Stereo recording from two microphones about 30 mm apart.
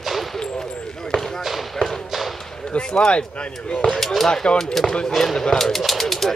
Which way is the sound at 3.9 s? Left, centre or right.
Centre.